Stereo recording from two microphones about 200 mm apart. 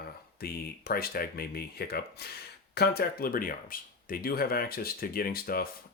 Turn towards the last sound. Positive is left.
turn(degrees=50)  # may be behind; listen again after turning